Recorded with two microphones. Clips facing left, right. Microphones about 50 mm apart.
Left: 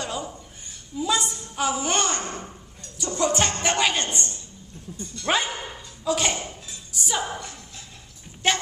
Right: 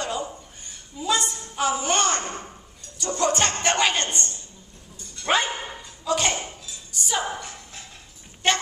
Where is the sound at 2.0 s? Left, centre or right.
Right.